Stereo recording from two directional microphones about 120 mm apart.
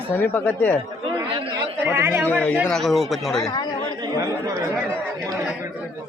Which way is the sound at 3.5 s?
35° left (ahead or behind).